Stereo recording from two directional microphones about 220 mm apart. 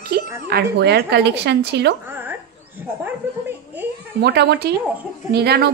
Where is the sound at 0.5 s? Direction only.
45° right (ahead or behind).